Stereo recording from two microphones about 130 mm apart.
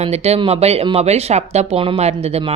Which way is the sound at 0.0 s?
55° right (ahead or behind).